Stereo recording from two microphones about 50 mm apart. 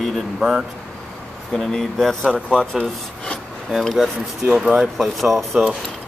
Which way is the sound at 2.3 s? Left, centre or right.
Left.